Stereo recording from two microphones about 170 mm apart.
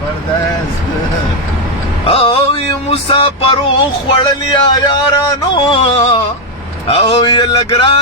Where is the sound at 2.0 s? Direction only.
35° left (ahead or behind).